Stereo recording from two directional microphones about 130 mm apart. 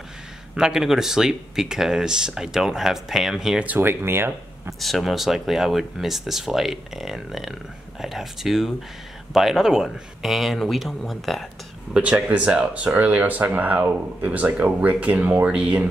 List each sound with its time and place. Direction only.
0.6 s speech: 5° right (ahead or behind)
4.7 s speech: centre (ahead or behind)